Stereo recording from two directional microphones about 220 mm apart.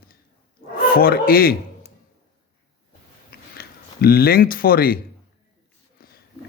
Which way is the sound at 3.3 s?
45° left (ahead or behind).